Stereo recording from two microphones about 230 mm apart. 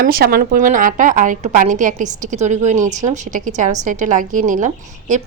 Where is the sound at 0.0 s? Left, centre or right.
Right.